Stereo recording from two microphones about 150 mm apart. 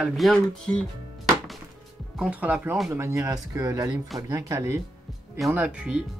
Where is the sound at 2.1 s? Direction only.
5° right (ahead or behind).